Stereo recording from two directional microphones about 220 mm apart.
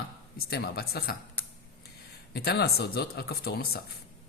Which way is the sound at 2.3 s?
45° left (ahead or behind).